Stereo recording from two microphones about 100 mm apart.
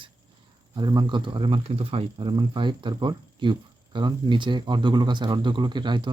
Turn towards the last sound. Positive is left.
turn(degrees=-50)  # may be behind; listen again after turning